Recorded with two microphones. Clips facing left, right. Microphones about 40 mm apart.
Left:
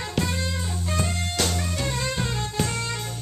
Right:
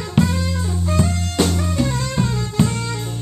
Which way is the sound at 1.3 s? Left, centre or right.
Centre.